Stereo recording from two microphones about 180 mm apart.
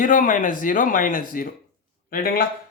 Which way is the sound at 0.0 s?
50° left (ahead or behind).